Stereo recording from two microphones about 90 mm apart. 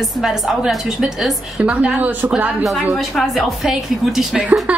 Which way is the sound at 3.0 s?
Centre (ahead or behind).